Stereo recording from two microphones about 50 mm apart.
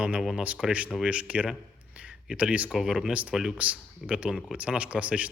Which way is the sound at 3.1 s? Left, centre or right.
Right.